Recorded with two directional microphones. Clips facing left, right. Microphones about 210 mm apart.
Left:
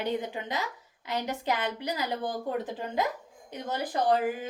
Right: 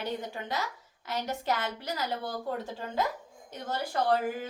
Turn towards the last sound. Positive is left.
turn(degrees=15)  # may be behind; listen again after turning